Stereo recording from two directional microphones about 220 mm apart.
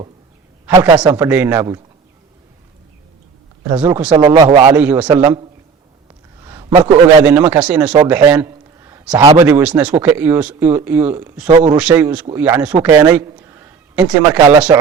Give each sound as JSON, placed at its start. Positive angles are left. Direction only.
{"t": 0.6, "sound": "a man's voice", "side_deg": -15}
{"t": 1.1, "sound": "speech", "side_deg": -10}
{"t": 3.8, "sound": "speech", "side_deg": -10}
{"t": 4.8, "sound": "a man's voice", "side_deg": -10}
{"t": 11.4, "sound": "speech", "side_deg": -30}
{"t": 11.8, "sound": "a man's voice", "side_deg": -5}